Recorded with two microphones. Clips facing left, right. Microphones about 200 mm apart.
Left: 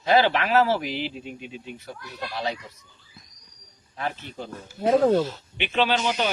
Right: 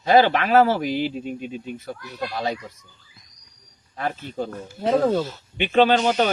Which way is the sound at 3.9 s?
50° right (ahead or behind).